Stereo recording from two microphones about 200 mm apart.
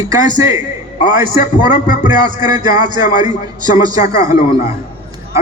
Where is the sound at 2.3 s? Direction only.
20° right (ahead or behind).